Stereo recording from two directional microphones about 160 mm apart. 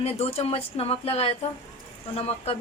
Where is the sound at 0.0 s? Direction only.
40° left (ahead or behind).